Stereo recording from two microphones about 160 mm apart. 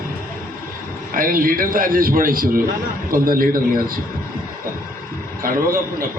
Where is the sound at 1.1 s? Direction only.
60° right (ahead or behind).